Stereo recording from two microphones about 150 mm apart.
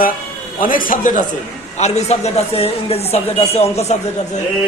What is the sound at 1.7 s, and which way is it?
Speech, 50° left (ahead or behind).